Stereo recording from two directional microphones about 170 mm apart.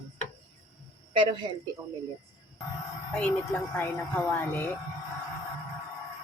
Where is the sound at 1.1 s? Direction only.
30° right (ahead or behind).